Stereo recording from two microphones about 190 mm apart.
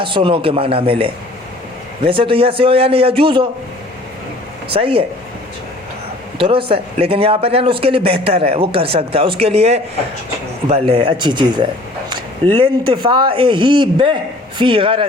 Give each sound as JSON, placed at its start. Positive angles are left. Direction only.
{"t": 0.0, "sound": "a man's voice", "side_deg": -25}
{"t": 4.7, "sound": "a man's voice", "side_deg": -30}
{"t": 6.4, "sound": "a man's voice", "side_deg": -30}